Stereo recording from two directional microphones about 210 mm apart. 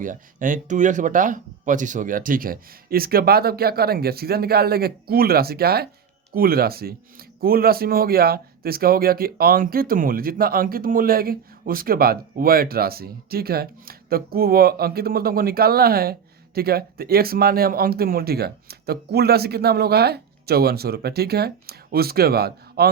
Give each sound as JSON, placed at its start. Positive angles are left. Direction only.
{"t": 0.0, "sound": "a man's voice", "side_deg": -40}